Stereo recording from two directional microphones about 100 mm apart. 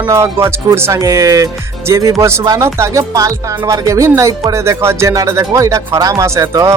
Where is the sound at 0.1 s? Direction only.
30° right (ahead or behind).